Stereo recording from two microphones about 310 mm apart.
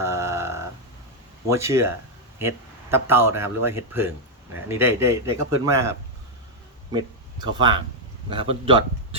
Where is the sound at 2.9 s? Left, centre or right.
Centre.